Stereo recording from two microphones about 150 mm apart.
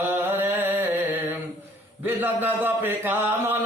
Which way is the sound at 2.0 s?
15° right (ahead or behind).